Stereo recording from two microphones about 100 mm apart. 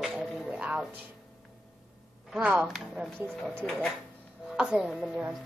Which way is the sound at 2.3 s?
10° right (ahead or behind).